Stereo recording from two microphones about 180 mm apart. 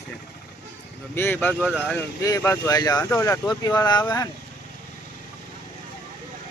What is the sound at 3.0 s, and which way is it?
Speech, 10° left (ahead or behind).